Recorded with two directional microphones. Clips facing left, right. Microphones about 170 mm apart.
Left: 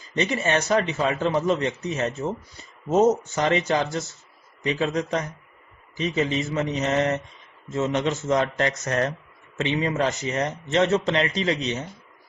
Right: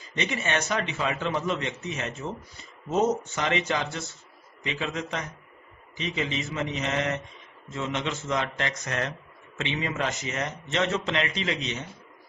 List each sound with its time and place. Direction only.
0.2 s speech: 35° left (ahead or behind)